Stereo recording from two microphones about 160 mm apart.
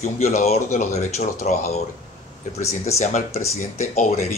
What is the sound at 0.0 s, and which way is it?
Speech, 50° left (ahead or behind).